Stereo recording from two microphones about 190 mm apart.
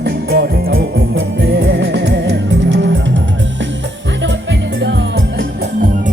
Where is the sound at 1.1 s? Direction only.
65° right (ahead or behind).